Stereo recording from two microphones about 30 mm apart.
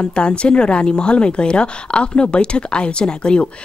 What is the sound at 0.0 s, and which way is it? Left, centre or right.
Speech, left.